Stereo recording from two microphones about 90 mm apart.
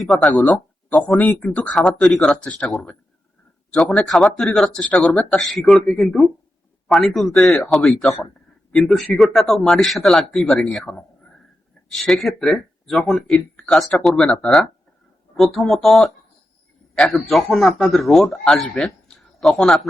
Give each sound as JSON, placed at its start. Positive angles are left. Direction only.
{"t": 0.0, "sound": "a man's voice", "side_deg": 0}
{"t": 1.2, "sound": "speech", "side_deg": 15}
{"t": 2.6, "sound": "a man's voice", "side_deg": 0}